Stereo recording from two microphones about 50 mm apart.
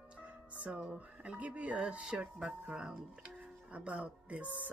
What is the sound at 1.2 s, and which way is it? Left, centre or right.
Speech, right.